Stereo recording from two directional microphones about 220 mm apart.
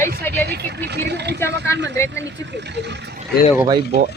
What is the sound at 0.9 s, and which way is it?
Speech, 50° right (ahead or behind).